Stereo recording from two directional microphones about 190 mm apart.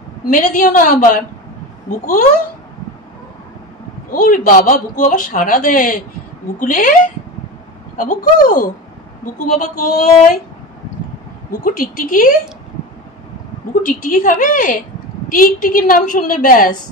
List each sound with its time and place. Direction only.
0.3 s a man's voice: 45° left (ahead or behind)
4.1 s a man's voice: 45° left (ahead or behind)
8.0 s a man's voice: 45° left (ahead or behind)
11.5 s a man's voice: 50° left (ahead or behind)
13.8 s a man's voice: 45° left (ahead or behind)